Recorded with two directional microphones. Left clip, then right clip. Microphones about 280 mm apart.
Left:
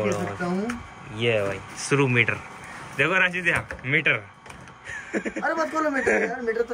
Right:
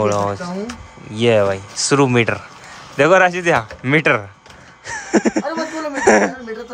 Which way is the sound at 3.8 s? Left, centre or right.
Right.